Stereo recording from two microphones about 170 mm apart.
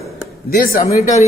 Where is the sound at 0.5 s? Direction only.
60° left (ahead or behind).